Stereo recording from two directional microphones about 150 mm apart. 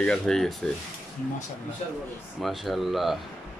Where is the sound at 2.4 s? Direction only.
Centre (ahead or behind).